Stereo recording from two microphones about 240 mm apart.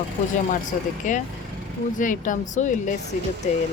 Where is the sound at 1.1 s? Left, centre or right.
Left.